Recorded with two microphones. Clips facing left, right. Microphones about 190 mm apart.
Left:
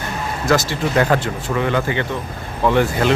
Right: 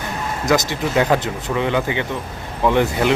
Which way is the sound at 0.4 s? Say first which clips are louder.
Even; 20° right (ahead or behind).